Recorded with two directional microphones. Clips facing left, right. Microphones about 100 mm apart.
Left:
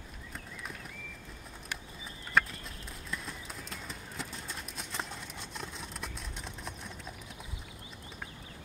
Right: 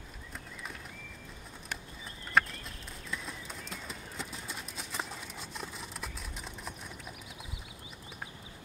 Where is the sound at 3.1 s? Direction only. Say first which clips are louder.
Right 1 dB; centre (ahead or behind).